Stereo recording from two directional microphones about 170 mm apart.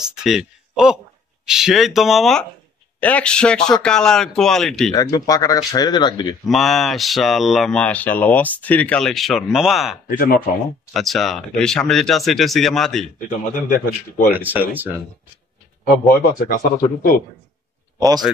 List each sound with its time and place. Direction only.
0.0 s speech: 5° right (ahead or behind)
4.9 s speech: 20° left (ahead or behind)
6.4 s speech: centre (ahead or behind)
10.0 s speech: 60° left (ahead or behind)
10.9 s speech: centre (ahead or behind)
13.7 s speech: 55° left (ahead or behind)
14.3 s speech: 10° right (ahead or behind)
15.8 s speech: 55° left (ahead or behind)
17.9 s a man's voice: 20° right (ahead or behind)